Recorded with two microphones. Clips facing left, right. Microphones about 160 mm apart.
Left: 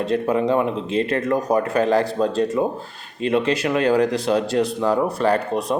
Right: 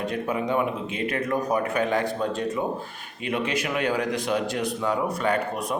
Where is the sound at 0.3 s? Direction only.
30° left (ahead or behind).